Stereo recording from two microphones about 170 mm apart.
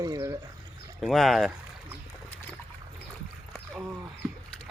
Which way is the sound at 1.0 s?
Centre (ahead or behind).